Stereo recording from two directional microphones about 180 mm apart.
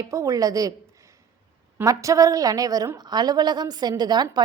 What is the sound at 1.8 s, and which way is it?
A woman's voice, 20° right (ahead or behind).